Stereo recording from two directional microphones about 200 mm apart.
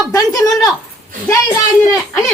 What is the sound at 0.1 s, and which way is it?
Speech, 15° left (ahead or behind).